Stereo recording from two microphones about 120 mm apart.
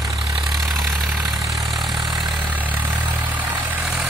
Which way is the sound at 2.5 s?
15° right (ahead or behind).